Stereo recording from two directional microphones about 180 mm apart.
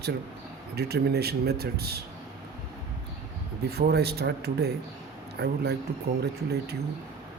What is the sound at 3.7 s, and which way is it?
Speech, 60° right (ahead or behind).